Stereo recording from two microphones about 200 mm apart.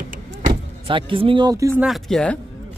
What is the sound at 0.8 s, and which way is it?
Speech, 25° right (ahead or behind).